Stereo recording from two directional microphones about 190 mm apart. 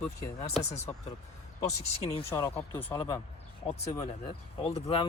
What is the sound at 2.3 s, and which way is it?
Speech, 15° left (ahead or behind).